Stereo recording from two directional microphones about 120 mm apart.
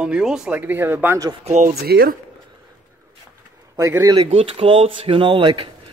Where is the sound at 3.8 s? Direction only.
25° right (ahead or behind).